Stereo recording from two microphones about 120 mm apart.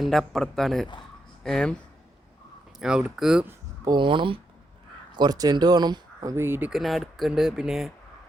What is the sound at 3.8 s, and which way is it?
Speech, 40° right (ahead or behind).